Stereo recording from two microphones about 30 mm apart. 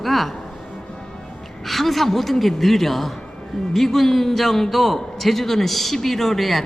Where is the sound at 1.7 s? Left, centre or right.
Centre.